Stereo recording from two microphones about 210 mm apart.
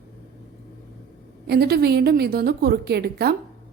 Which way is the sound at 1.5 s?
50° right (ahead or behind).